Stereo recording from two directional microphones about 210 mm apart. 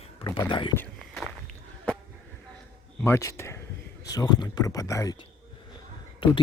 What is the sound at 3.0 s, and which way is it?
A man's voice, 15° left (ahead or behind).